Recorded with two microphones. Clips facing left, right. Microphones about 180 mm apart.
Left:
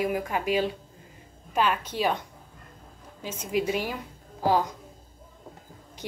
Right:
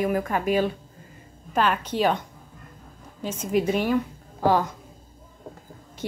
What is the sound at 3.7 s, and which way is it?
Speech, 10° left (ahead or behind).